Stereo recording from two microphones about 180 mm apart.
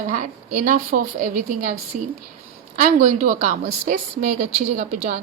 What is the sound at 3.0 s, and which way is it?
A woman's voice, 40° right (ahead or behind).